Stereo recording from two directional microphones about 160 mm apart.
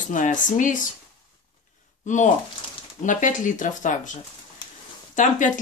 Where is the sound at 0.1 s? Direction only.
55° left (ahead or behind).